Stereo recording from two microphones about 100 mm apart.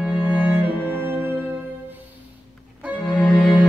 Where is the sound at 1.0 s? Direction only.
20° right (ahead or behind).